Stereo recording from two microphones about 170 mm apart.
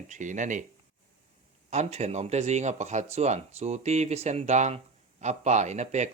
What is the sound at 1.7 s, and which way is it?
Speech, 40° right (ahead or behind).